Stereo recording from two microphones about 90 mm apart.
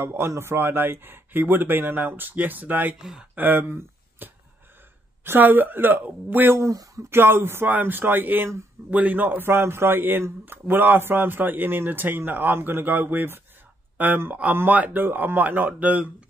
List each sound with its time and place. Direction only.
0.0 s a man's voice: 25° right (ahead or behind)
3.0 s speech: 5° right (ahead or behind)
3.3 s a man's voice: 25° right (ahead or behind)
6.6 s speech: 40° right (ahead or behind)
7.1 s a man's voice: 25° right (ahead or behind)